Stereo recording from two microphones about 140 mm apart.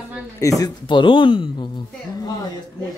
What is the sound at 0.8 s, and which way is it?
Speech, 35° left (ahead or behind).